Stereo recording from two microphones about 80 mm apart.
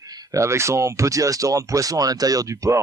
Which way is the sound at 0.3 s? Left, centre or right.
Right.